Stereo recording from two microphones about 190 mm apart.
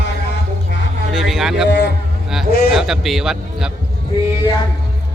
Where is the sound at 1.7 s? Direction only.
65° left (ahead or behind).